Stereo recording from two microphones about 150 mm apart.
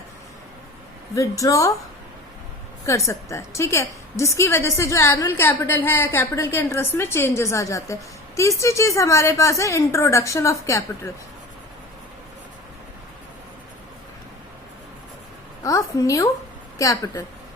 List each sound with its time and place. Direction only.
1.1 s a woman's voice: 20° left (ahead or behind)
2.8 s a woman's voice: 20° left (ahead or behind)
16.0 s a woman's voice: 20° left (ahead or behind)